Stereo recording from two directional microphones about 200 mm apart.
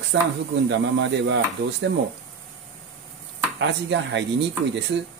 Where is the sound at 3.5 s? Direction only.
65° right (ahead or behind).